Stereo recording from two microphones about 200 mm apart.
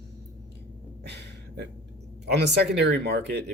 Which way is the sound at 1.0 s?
55° right (ahead or behind).